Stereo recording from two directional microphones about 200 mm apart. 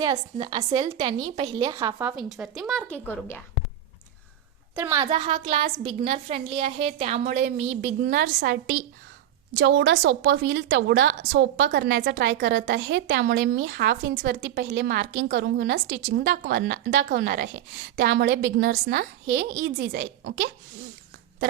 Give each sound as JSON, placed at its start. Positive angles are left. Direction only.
{"t": 0.0, "sound": "a woman's voice", "side_deg": -20}
{"t": 4.8, "sound": "a woman's voice", "side_deg": -10}
{"t": 5.2, "sound": "a woman's voice", "side_deg": -25}
{"t": 9.6, "sound": "a woman's voice", "side_deg": -70}